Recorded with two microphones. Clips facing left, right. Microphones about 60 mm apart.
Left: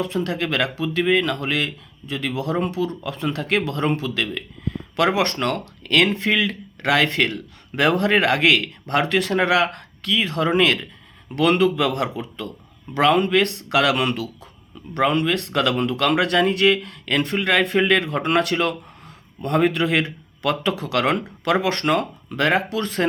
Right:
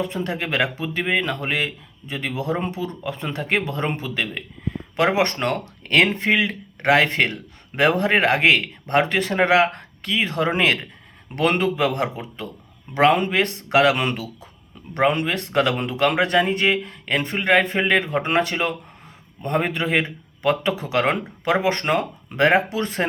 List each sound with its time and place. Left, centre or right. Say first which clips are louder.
0.0 s speech: left 2 dB; right
4.2 s a sound: left 1 dB; right
5.0 s speech: even; right
21.7 s speech: even; centre
22.4 s speech: right 3 dB; right
22.7 s speech: left 1 dB; right